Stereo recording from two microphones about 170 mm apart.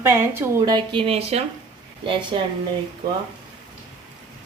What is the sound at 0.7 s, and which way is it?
Speech, 30° right (ahead or behind).